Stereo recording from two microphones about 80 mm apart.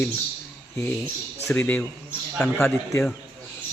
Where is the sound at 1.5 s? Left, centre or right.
Centre.